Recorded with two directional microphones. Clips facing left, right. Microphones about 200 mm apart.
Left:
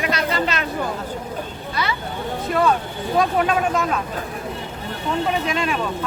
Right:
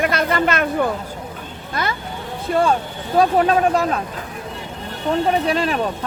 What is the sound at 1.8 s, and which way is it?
Speech, 50° right (ahead or behind).